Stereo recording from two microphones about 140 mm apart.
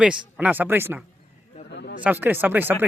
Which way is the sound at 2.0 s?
15° right (ahead or behind).